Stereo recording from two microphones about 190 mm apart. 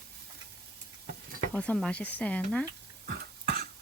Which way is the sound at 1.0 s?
50° right (ahead or behind).